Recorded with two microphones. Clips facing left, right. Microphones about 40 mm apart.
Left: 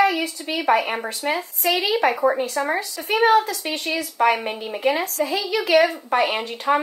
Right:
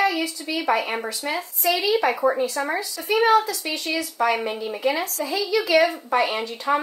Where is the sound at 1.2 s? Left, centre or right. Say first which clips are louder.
Left 5 dB; left.